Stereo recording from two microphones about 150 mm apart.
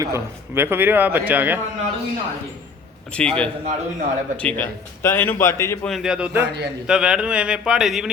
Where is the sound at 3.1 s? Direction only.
5° left (ahead or behind).